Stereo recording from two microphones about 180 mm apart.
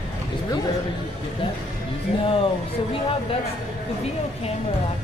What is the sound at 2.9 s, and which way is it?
Speech, 30° left (ahead or behind).